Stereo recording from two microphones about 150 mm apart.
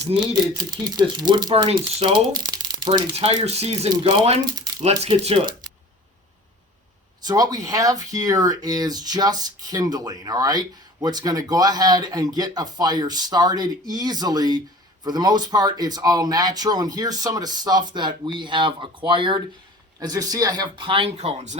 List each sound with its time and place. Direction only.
0.1 s speech: 30° right (ahead or behind)
3.2 s speech: 45° right (ahead or behind)
4.4 s speech: 25° right (ahead or behind)
4.8 s speech: 40° right (ahead or behind)
7.3 s speech: 25° right (ahead or behind); by 21.6 s 50° right (ahead or behind)